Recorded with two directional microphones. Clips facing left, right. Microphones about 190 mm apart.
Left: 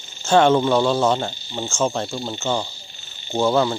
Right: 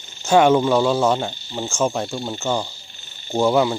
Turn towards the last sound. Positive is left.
turn(degrees=-10)  # may be behind; listen again after turning